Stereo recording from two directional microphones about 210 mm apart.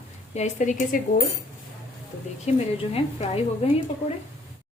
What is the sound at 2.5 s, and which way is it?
A woman's voice, 30° left (ahead or behind).